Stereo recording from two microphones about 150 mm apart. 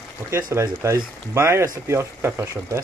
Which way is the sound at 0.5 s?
20° right (ahead or behind).